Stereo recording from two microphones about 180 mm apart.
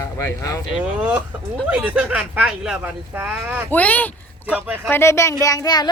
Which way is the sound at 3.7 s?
10° left (ahead or behind).